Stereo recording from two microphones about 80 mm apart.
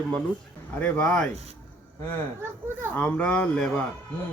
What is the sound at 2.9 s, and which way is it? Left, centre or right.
Speech, centre.